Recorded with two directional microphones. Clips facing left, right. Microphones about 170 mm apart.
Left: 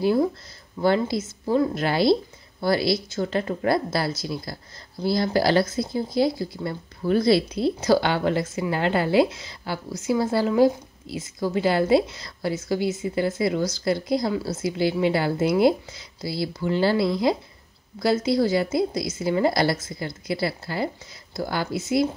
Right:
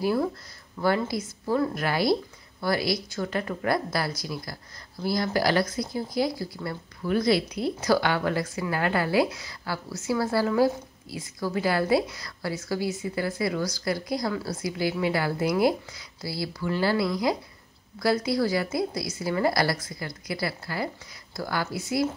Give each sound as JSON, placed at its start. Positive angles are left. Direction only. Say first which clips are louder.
{"t": 0.0, "sound": "speech", "louder": "left 4 dB", "side_deg": 25}